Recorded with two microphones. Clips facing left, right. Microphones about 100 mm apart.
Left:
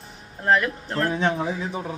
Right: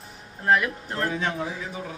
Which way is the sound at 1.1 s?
25° left (ahead or behind).